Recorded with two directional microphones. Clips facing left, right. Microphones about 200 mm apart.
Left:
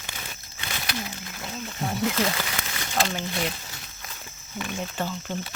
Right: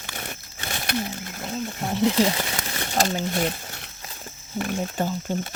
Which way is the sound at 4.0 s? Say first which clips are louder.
Right 3 dB; 30° right (ahead or behind).